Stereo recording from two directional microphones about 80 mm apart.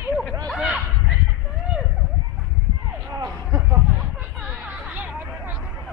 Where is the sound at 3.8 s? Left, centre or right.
Centre.